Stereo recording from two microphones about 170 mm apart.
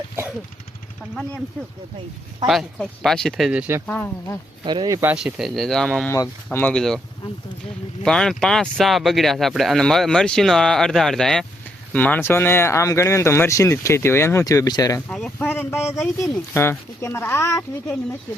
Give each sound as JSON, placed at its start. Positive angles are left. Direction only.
{"t": 2.5, "sound": "speech", "side_deg": 0}
{"t": 3.8, "sound": "speech", "side_deg": 10}
{"t": 4.6, "sound": "speech", "side_deg": -25}
{"t": 4.9, "sound": "speech", "side_deg": -10}
{"t": 6.1, "sound": "speech", "side_deg": 15}
{"t": 8.0, "sound": "speech", "side_deg": 5}
{"t": 15.1, "sound": "speech", "side_deg": 5}
{"t": 16.0, "sound": "speech", "side_deg": 0}
{"t": 16.6, "sound": "speech", "side_deg": 15}